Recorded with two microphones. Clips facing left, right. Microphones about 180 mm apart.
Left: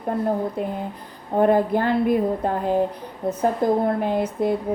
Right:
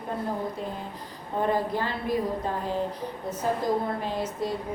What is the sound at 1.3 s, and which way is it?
A woman's voice, 55° left (ahead or behind).